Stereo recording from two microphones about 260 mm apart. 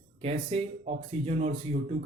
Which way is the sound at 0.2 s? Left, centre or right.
Right.